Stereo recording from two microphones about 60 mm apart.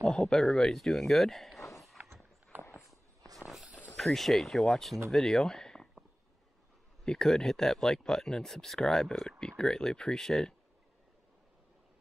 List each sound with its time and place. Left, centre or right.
0.0 s speech: centre
2.0 s walk: right
2.5 s a sound: right
3.3 s a sound: centre
3.9 s speech: centre
7.1 s speech: centre